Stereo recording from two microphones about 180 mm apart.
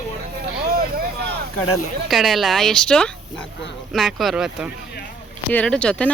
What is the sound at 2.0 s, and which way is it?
Speech, centre (ahead or behind).